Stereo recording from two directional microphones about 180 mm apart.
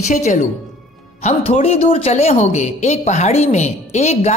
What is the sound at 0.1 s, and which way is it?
A woman's voice, 45° left (ahead or behind).